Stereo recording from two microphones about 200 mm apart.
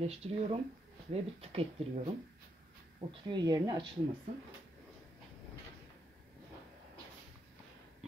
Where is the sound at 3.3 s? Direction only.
20° right (ahead or behind).